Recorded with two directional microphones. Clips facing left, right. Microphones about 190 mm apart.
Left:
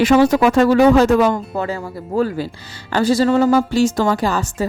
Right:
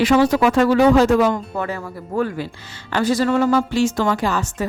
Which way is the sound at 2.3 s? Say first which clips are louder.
Left 3 dB; 35° left (ahead or behind).